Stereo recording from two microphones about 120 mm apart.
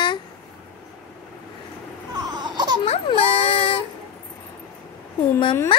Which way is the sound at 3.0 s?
55° left (ahead or behind).